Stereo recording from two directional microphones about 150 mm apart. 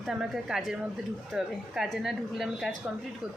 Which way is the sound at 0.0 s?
5° right (ahead or behind).